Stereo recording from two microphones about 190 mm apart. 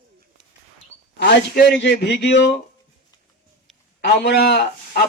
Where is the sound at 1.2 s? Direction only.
60° left (ahead or behind).